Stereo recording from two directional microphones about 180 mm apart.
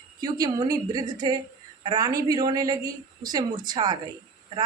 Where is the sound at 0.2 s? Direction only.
20° right (ahead or behind).